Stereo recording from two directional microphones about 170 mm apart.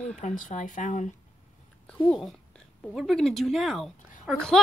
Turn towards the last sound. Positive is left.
turn(degrees=0)  # may be behind; listen again after turning